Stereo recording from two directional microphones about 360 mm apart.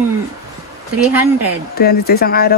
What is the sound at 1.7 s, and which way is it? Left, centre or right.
Speech, left.